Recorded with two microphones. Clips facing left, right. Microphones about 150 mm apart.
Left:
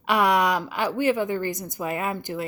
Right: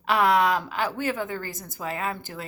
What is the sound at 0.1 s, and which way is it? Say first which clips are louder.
A woman's voice: even; 10° left (ahead or behind).